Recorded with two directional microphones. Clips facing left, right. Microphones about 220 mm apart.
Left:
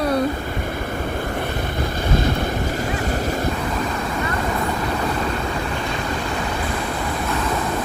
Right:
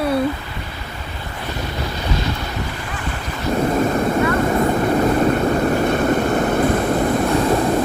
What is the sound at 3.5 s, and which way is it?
Vehicle, 45° right (ahead or behind).